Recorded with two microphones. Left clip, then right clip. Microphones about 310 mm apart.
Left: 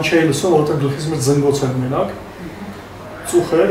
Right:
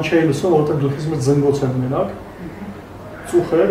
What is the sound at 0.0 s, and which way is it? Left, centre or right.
Speech, centre.